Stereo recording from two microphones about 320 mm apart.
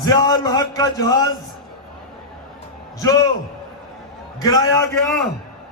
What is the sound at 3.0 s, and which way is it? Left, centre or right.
Speech, centre.